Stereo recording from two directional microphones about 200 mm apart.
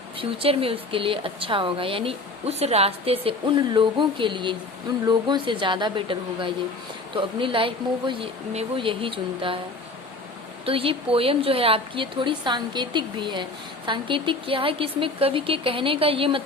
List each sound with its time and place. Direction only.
0.2 s a woman's voice: 30° right (ahead or behind)
10.7 s a woman's voice: 25° right (ahead or behind)